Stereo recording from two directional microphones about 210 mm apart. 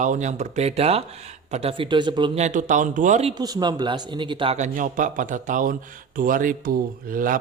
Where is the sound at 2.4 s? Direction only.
35° right (ahead or behind).